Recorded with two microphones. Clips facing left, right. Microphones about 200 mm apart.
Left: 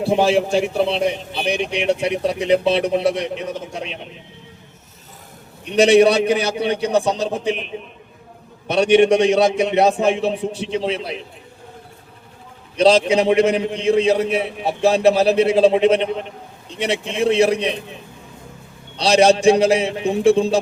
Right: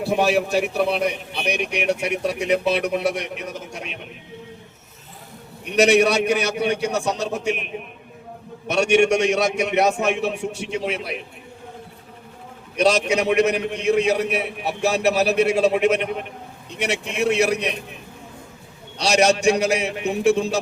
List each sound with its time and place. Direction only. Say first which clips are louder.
0.0 s a man's voice: left 3 dB; 25° left (ahead or behind)
5.6 s a man's voice: left 4 dB; 30° left (ahead or behind)
12.7 s a man's voice: left 5 dB; 30° left (ahead or behind)
18.9 s a man's voice: left 4 dB; 30° left (ahead or behind)